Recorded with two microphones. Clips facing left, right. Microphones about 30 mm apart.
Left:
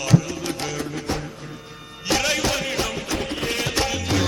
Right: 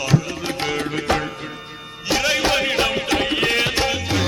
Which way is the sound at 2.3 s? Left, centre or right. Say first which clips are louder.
Right 5 dB; right.